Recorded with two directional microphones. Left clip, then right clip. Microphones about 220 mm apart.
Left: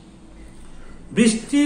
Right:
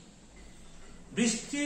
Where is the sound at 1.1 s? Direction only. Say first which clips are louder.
Left 12 dB; 55° left (ahead or behind).